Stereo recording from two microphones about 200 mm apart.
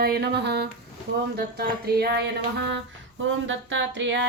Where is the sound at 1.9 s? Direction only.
55° right (ahead or behind).